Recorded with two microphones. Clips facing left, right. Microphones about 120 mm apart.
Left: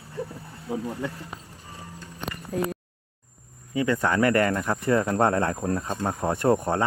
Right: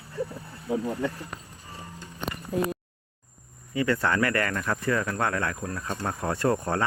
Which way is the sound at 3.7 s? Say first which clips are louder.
Left 2 dB; 15° left (ahead or behind).